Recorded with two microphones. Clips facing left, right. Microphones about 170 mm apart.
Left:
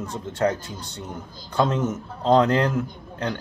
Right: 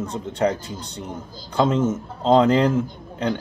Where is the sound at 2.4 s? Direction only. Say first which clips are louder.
Right 3 dB; 10° right (ahead or behind).